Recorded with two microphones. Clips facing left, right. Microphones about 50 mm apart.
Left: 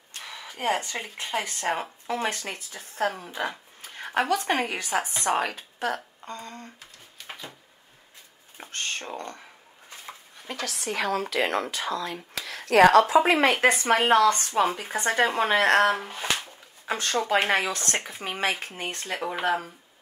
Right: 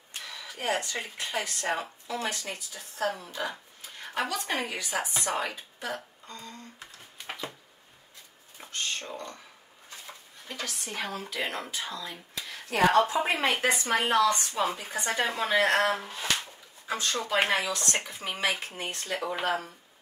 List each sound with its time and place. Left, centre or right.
0.5 s speech: left
4.1 s speech: left
8.5 s speech: left
10.4 s speech: left
18.8 s speech: left